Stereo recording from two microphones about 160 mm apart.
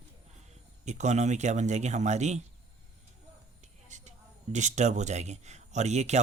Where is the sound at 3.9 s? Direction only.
50° right (ahead or behind).